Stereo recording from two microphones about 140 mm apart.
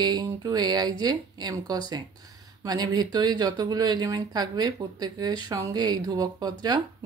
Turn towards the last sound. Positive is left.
turn(degrees=-30)  # may be behind; listen again after turning